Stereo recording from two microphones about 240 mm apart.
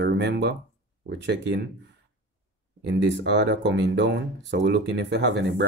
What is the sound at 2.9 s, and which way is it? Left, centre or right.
Speech, right.